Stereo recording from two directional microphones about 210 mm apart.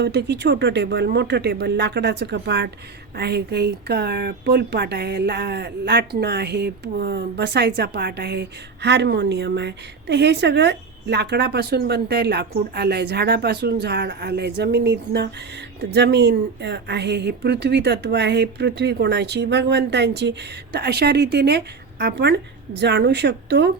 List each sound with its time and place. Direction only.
0.0 s a woman's voice: 55° right (ahead or behind)